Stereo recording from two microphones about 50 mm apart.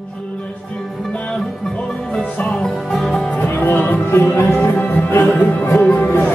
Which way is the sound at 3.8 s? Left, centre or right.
Left.